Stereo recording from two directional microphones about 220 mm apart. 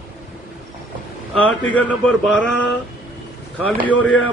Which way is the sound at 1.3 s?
5° left (ahead or behind).